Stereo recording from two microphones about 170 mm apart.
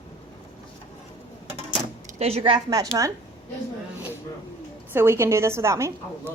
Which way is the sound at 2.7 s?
20° right (ahead or behind).